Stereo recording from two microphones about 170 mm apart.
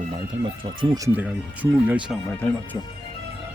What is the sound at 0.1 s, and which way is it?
Speech, 30° right (ahead or behind).